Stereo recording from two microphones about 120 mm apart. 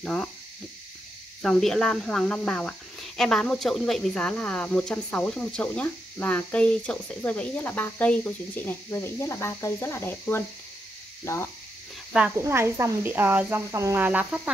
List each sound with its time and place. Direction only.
0.0 s speech: centre (ahead or behind)
1.4 s speech: 5° left (ahead or behind); by 11.5 s 25° left (ahead or behind)
12.1 s speech: 10° right (ahead or behind)
12.4 s speech: 20° right (ahead or behind)